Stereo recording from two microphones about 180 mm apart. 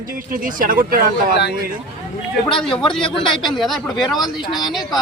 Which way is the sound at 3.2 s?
25° left (ahead or behind).